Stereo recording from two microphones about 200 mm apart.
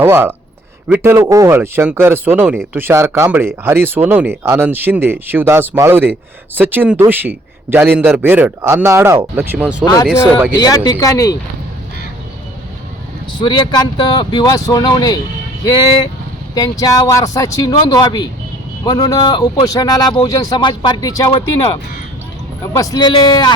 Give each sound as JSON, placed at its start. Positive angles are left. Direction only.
{"t": 0.0, "sound": "speech", "side_deg": -10}
{"t": 9.8, "sound": "speech", "side_deg": 20}
{"t": 13.4, "sound": "speech", "side_deg": 25}
{"t": 16.6, "sound": "speech", "side_deg": 15}